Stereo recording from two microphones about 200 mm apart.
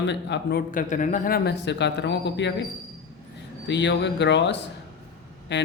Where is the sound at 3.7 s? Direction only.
60° left (ahead or behind).